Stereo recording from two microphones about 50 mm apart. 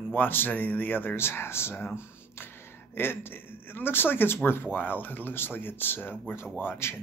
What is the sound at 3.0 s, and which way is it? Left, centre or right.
A man's voice, left.